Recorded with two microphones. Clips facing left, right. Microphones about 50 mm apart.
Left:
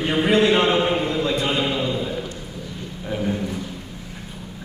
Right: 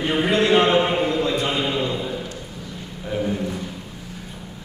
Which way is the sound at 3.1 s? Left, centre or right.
Centre.